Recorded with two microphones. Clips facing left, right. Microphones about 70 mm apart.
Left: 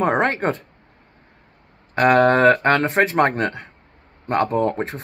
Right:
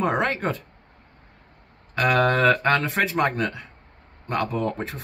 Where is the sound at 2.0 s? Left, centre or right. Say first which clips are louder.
Left 6 dB; left.